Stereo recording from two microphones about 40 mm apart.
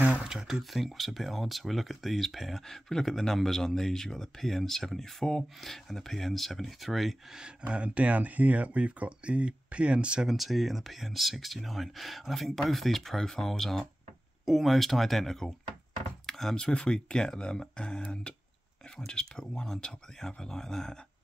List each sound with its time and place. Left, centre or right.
0.2 s speech: centre
0.7 s speech: centre
7.3 s speech: right
10.2 s speech: centre
16.3 s a sound: centre
16.5 s speech: left